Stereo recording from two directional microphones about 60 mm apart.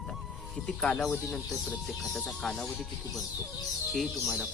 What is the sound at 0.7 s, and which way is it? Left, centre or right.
Speech, centre.